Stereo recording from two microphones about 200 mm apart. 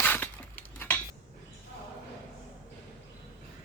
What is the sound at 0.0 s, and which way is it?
Cutlery, 10° left (ahead or behind).